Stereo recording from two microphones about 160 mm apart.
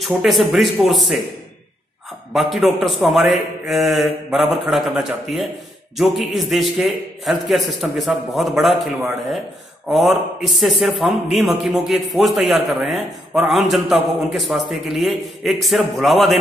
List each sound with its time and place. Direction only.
0.0 s a man's voice: centre (ahead or behind)
2.3 s a man's voice: centre (ahead or behind)